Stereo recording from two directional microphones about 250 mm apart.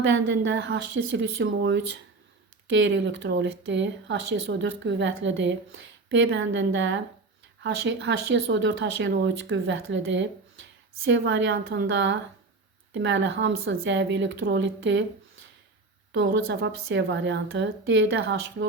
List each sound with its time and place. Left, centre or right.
0.0 s speech: right
16.1 s speech: right